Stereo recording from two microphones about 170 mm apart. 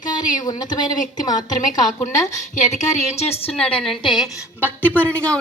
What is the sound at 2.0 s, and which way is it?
A woman's voice, 45° left (ahead or behind).